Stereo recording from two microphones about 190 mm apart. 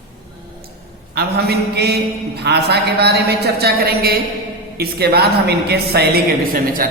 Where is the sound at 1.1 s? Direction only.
60° right (ahead or behind).